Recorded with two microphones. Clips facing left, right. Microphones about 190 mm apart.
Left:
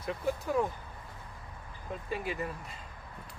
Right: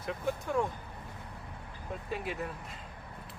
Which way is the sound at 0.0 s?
Centre (ahead or behind).